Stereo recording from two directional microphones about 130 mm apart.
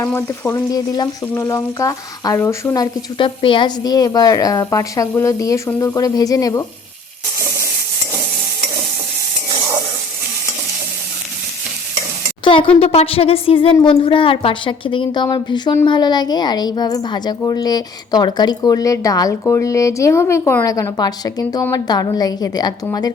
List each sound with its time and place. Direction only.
0.2 s a woman's voice: 20° left (ahead or behind)
3.2 s a woman's voice: 40° left (ahead or behind)
12.5 s a woman's voice: 40° left (ahead or behind)